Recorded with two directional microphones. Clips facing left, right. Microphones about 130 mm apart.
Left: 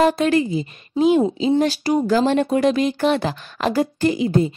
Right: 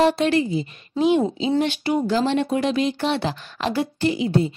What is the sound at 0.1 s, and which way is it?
A woman's voice, 45° left (ahead or behind).